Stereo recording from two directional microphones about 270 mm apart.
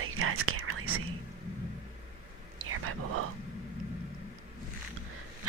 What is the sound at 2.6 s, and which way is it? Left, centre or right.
Whispering, right.